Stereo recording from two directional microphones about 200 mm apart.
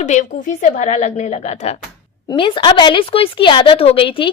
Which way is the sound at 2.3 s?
25° left (ahead or behind).